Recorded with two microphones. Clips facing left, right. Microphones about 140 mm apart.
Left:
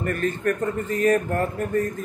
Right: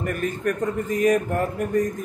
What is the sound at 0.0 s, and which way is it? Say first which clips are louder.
A man's voice: left 1 dB; 10° right (ahead or behind).